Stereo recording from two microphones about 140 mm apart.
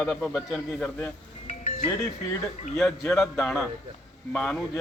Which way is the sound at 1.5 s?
50° left (ahead or behind).